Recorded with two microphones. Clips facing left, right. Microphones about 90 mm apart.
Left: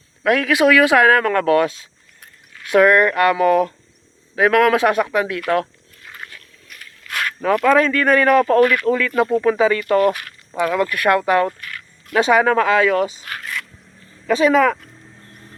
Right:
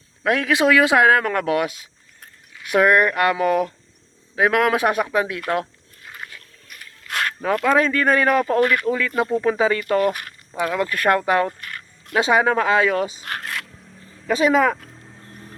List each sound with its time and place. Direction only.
0.2 s speech: 25° right (ahead or behind)
6.1 s wild animals: 10° right (ahead or behind)
7.0 s speech: 25° right (ahead or behind)
13.2 s a sound: 40° right (ahead or behind)
14.3 s speech: 20° right (ahead or behind)